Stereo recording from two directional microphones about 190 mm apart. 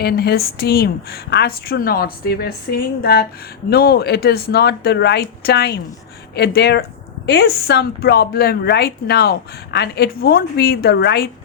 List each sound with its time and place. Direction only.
0.0 s a woman's voice: 55° left (ahead or behind)